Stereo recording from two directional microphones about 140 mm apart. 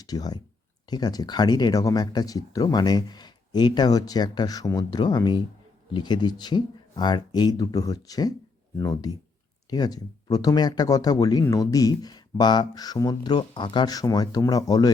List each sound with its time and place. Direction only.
0.0 s speech: 25° left (ahead or behind)